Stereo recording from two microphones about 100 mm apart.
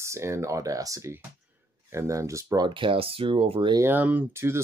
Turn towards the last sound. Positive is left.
turn(degrees=-25)  # may be behind; listen again after turning